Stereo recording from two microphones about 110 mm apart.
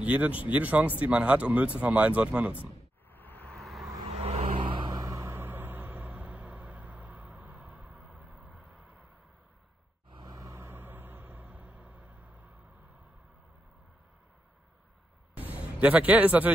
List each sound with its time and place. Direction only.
0.0 s speech: 15° right (ahead or behind)
2.6 s vehicle: 15° left (ahead or behind)
4.2 s vehicle: 70° right (ahead or behind); by 5.0 s 45° right (ahead or behind)
5.0 s music: 25° right (ahead or behind); by 8.8 s 10° right (ahead or behind)
10.3 s vehicle: 30° right (ahead or behind)
15.3 s a sound: 15° right (ahead or behind)